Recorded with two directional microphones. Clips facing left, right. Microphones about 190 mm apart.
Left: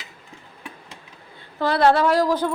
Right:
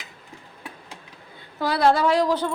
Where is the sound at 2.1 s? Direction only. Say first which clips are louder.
Left 1 dB; 10° left (ahead or behind).